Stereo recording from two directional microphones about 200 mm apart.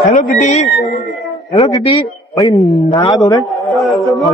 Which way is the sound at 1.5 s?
20° left (ahead or behind).